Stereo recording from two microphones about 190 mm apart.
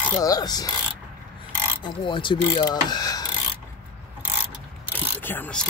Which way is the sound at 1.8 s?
25° left (ahead or behind).